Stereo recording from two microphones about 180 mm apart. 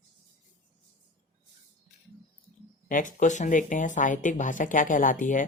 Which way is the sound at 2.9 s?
45° left (ahead or behind).